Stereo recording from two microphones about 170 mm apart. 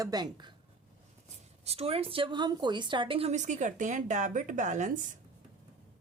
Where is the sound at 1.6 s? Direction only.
35° right (ahead or behind).